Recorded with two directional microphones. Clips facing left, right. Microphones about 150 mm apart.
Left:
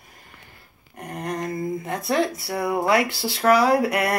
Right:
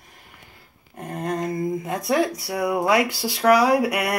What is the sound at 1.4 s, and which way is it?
Speech, 20° right (ahead or behind).